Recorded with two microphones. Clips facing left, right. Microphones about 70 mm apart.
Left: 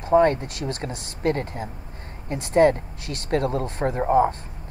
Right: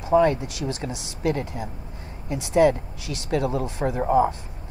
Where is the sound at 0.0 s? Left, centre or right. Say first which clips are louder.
Left 1 dB; left.